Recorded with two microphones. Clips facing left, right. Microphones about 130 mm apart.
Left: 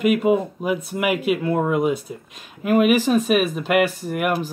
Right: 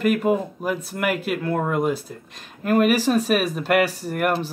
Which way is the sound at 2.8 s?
35° right (ahead or behind).